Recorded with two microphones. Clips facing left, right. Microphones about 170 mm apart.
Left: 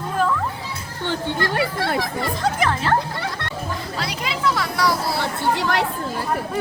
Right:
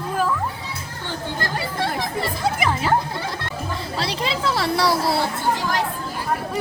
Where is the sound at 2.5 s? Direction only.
10° right (ahead or behind).